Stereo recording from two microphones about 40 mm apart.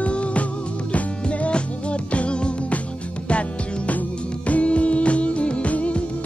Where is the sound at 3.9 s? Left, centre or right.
Left.